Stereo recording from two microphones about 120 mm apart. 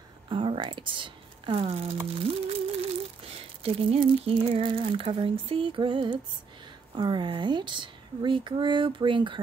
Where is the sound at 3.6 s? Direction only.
50° right (ahead or behind).